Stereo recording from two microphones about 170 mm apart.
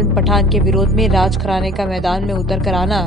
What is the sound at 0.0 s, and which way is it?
A woman's voice, centre (ahead or behind).